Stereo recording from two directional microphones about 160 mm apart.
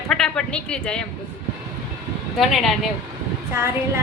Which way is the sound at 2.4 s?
Centre (ahead or behind).